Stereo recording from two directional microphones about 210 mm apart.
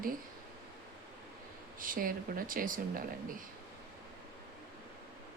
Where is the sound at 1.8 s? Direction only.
40° right (ahead or behind).